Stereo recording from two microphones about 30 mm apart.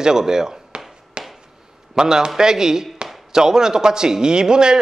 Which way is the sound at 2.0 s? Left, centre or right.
Centre.